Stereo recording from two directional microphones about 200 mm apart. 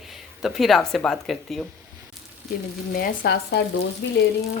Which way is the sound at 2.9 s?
50° left (ahead or behind).